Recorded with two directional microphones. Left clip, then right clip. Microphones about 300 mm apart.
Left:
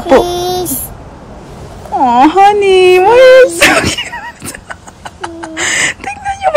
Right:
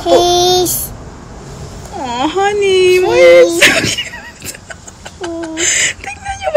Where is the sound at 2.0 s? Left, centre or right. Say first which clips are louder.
Left 9 dB; centre.